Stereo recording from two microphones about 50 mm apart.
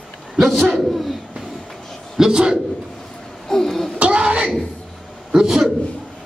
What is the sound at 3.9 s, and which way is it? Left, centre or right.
Throat clearing, right.